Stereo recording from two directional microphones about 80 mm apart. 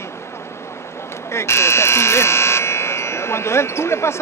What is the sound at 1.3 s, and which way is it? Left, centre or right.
Speech, left.